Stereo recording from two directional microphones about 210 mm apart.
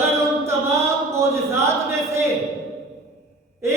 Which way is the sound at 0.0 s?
15° right (ahead or behind).